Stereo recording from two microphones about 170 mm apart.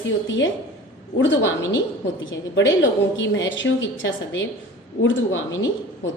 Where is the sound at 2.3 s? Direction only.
90° left.